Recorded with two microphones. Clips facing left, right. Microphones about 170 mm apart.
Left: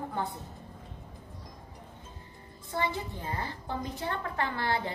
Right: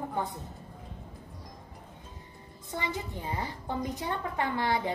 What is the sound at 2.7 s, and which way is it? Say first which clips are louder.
A woman's voice: left 2 dB; 15° right (ahead or behind).